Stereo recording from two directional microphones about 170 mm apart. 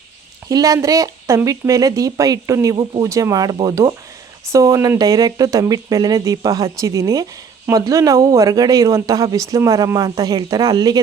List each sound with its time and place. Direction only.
0.4 s a man's voice: 20° right (ahead or behind)